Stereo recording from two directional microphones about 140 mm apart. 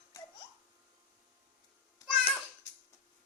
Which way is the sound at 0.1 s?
20° left (ahead or behind).